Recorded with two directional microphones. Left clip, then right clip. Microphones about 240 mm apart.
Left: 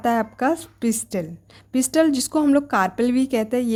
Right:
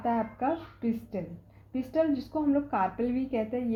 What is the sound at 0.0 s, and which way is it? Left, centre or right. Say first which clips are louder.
A woman's voice: left 8 dB; left.